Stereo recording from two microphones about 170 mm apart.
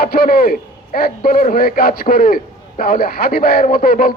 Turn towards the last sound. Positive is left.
turn(degrees=60)  # may be behind; listen again after turning